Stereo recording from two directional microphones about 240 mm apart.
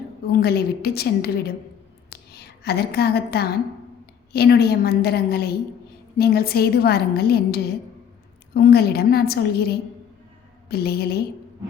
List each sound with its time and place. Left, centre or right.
0.3 s a woman's voice: left
2.0 s a sound: left
4.3 s a woman's voice: left